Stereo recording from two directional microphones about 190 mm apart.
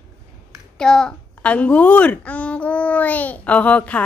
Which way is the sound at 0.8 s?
5° left (ahead or behind).